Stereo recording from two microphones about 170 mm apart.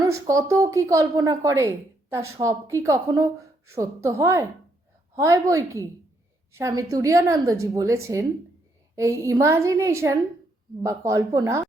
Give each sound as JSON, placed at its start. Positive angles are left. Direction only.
{"t": 0.0, "sound": "a woman's voice", "side_deg": -20}